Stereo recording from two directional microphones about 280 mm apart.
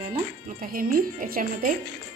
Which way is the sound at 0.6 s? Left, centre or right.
Right.